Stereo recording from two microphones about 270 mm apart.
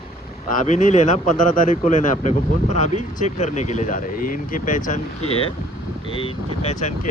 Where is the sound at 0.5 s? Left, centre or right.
Left.